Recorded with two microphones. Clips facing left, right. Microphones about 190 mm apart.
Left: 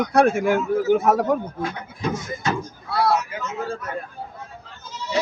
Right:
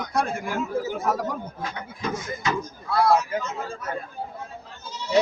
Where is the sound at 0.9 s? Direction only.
65° left (ahead or behind).